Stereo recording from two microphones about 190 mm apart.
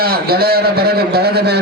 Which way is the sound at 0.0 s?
55° right (ahead or behind).